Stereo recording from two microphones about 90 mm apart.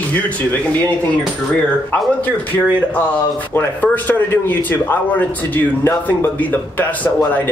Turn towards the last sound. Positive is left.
turn(degrees=20)  # may be behind; listen again after turning